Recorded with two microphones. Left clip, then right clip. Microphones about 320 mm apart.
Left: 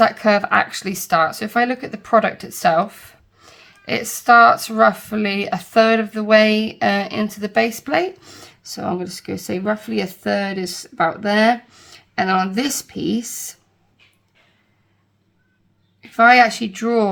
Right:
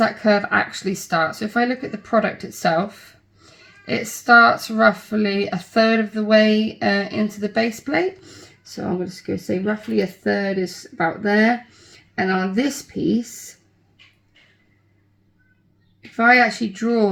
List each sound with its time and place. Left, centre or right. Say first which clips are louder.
0.0 s speech: left 3 dB; centre
16.1 s speech: left 3 dB; centre